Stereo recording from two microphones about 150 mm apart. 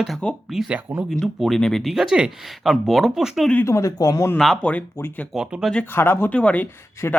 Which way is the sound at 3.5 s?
15° left (ahead or behind).